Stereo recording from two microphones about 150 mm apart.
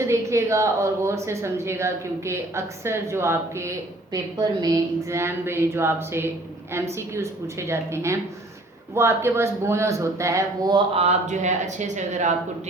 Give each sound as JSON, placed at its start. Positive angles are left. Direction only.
{"t": 0.1, "sound": "a woman's voice", "side_deg": -20}
{"t": 10.8, "sound": "speech", "side_deg": -40}